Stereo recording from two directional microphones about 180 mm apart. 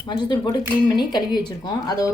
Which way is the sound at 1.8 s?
20° left (ahead or behind).